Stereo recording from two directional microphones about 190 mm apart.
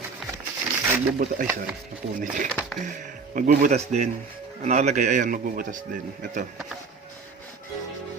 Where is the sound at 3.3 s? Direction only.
40° right (ahead or behind).